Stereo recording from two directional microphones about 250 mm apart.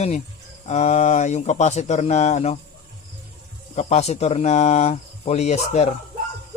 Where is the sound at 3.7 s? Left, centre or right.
Left.